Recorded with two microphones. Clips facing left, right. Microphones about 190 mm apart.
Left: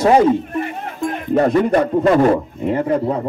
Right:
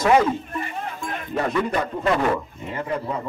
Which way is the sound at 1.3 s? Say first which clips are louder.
Left 9 dB; 45° left (ahead or behind).